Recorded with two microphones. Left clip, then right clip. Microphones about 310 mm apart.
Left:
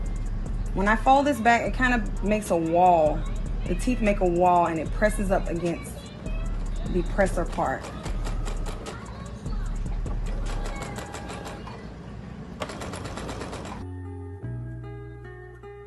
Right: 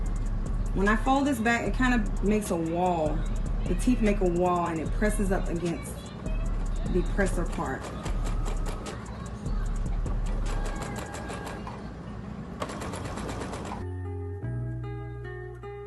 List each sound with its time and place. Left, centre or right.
0.8 s speech: centre
6.8 s music: centre
10.8 s music: centre
12.5 s mechanisms: centre